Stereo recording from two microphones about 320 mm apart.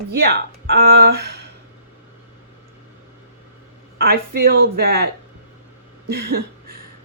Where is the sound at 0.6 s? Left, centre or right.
Right.